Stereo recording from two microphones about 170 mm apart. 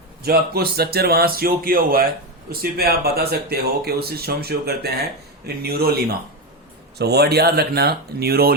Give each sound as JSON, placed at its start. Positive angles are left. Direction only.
{"t": 0.2, "sound": "speech", "side_deg": -65}
{"t": 7.0, "sound": "speech", "side_deg": -70}